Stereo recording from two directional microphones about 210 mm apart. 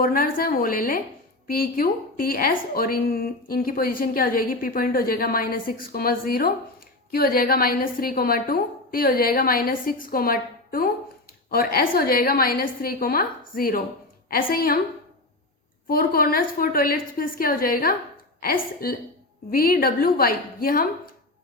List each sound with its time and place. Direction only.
0.0 s a woman's voice: 45° left (ahead or behind)
15.9 s a woman's voice: 45° left (ahead or behind)